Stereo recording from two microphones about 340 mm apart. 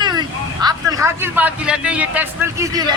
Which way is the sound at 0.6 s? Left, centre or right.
Centre.